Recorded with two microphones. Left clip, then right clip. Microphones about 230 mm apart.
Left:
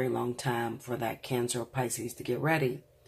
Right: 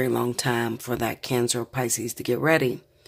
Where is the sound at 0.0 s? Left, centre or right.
Right.